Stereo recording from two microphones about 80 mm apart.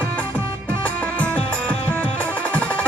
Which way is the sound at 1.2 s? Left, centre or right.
Centre.